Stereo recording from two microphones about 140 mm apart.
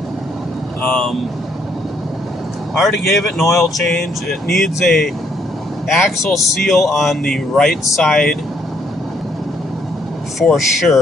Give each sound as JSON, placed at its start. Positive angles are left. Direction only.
{"t": 0.8, "sound": "speech", "side_deg": 5}
{"t": 2.7, "sound": "speech", "side_deg": 0}
{"t": 10.4, "sound": "speech", "side_deg": 0}